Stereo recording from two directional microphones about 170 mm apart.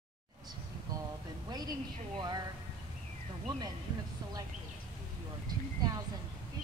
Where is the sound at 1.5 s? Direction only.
25° right (ahead or behind).